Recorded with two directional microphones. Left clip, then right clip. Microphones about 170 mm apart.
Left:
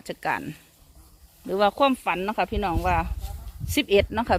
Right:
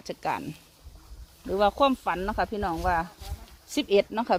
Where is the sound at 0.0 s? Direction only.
20° left (ahead or behind).